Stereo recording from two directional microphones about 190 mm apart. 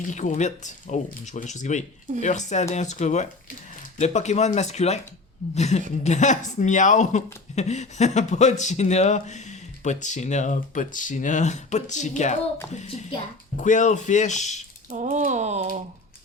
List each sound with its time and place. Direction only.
0.1 s speech: 40° left (ahead or behind)
14.8 s speech: 40° right (ahead or behind)